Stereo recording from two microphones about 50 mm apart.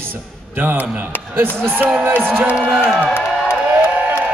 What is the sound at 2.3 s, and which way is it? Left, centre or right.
Speech, right.